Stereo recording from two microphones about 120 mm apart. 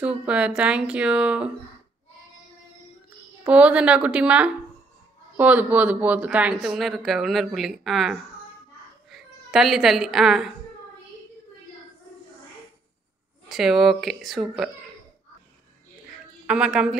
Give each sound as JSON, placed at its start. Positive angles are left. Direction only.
{"t": 0.0, "sound": "speech", "side_deg": -10}
{"t": 3.4, "sound": "speech", "side_deg": -10}
{"t": 13.5, "sound": "speech", "side_deg": 0}
{"t": 16.4, "sound": "speech", "side_deg": -5}